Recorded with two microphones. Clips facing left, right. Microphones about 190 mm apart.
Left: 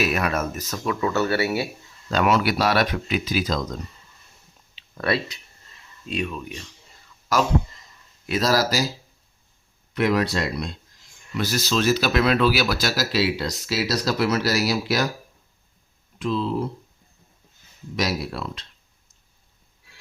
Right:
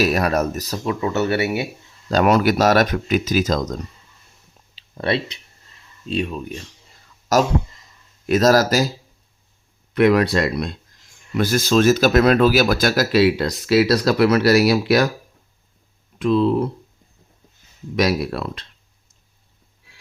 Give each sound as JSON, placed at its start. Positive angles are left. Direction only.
{"t": 0.0, "sound": "speech", "side_deg": -40}
{"t": 2.0, "sound": "speech", "side_deg": -40}
{"t": 4.7, "sound": "clicking", "side_deg": -25}
{"t": 6.1, "sound": "speech", "side_deg": -30}
{"t": 9.9, "sound": "speech", "side_deg": -60}
{"t": 16.1, "sound": "speech", "side_deg": -60}
{"t": 17.9, "sound": "speech", "side_deg": -55}